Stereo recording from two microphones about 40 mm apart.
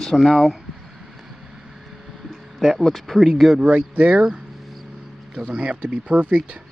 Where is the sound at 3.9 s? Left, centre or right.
Right.